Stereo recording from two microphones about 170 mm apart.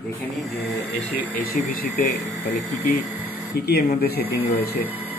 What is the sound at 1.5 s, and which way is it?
Speech, 55° left (ahead or behind).